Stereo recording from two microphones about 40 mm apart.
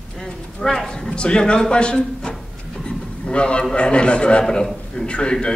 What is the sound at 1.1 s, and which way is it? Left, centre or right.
A man's voice, left.